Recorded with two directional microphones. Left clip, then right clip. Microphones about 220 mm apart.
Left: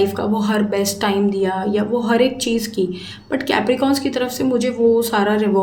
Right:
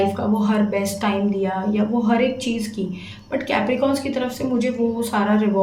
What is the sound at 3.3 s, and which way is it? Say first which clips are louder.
A woman's voice: left 3 dB; 50° left (ahead or behind).